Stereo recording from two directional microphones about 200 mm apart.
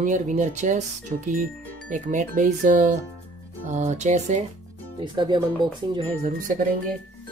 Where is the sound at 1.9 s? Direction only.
40° right (ahead or behind).